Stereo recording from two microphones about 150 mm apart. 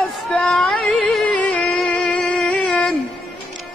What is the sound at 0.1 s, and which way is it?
Music, 5° left (ahead or behind).